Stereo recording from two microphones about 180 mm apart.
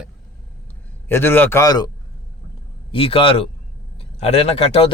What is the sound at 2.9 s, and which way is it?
A man's voice, 30° left (ahead or behind).